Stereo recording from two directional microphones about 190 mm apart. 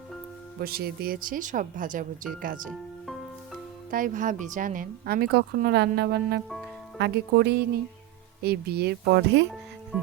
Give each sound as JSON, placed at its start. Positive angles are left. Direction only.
{"t": 0.6, "sound": "a woman's voice", "side_deg": -55}
{"t": 3.1, "sound": "music", "side_deg": 0}
{"t": 3.9, "sound": "a woman's voice", "side_deg": -45}
{"t": 9.9, "sound": "speech", "side_deg": -5}